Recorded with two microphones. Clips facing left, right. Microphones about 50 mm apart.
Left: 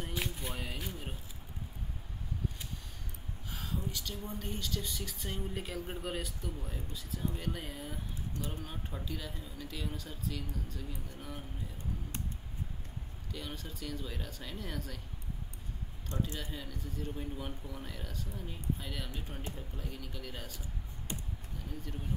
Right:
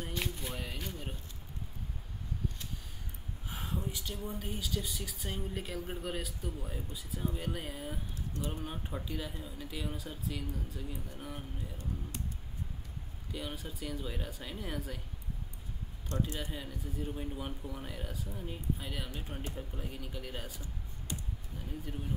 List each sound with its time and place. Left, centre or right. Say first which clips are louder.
0.1 s a sound: even; centre
3.4 s speech: right 1 dB; right
13.3 s speech: right 2 dB; centre
16.1 s speech: right 2 dB; left
16.5 s speech: right 2 dB; centre